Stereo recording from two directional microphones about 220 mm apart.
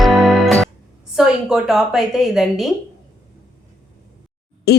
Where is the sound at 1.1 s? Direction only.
Centre (ahead or behind).